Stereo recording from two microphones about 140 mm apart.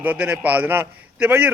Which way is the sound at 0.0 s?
15° right (ahead or behind).